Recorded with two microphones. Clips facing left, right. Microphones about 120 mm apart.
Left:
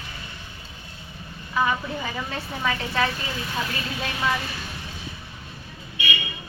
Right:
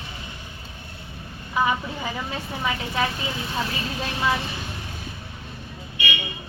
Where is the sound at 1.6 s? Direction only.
20° right (ahead or behind).